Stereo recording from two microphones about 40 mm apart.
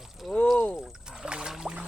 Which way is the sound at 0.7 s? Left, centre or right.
Centre.